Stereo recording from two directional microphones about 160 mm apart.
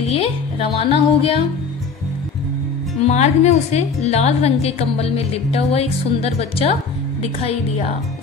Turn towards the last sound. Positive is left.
turn(degrees=40)  # may be behind; listen again after turning